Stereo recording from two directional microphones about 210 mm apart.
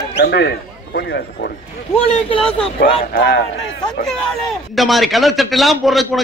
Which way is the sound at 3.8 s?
Centre (ahead or behind).